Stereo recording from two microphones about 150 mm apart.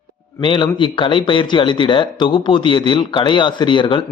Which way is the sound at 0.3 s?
35° left (ahead or behind).